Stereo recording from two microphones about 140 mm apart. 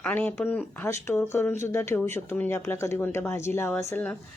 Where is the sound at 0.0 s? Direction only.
10° left (ahead or behind).